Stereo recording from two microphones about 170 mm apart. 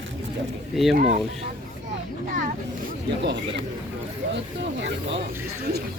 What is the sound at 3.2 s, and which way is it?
Speech, 90° right.